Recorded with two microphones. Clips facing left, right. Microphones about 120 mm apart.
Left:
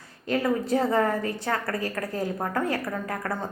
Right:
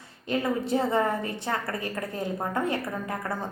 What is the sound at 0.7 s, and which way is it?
A woman's voice, 25° right (ahead or behind).